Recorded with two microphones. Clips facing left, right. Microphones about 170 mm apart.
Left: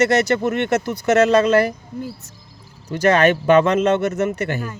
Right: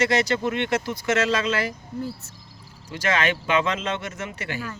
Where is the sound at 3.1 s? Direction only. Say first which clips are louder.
Left 9 dB; 60° left (ahead or behind).